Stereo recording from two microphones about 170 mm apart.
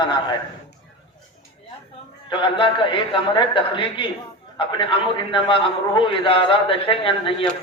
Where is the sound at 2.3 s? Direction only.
30° left (ahead or behind).